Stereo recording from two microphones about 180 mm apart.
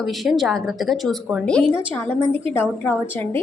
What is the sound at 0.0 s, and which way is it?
A woman's voice, centre (ahead or behind).